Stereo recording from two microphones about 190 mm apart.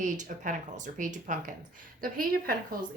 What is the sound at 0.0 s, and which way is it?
A woman's voice, 40° right (ahead or behind).